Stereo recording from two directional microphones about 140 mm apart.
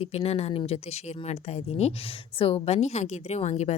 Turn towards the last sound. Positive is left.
turn(degrees=55)  # may be behind; listen again after turning